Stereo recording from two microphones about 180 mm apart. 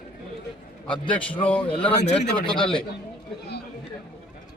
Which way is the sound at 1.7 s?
30° left (ahead or behind).